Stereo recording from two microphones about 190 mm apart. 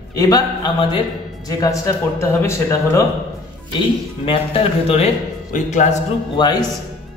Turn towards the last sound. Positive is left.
turn(degrees=25)  # may be behind; listen again after turning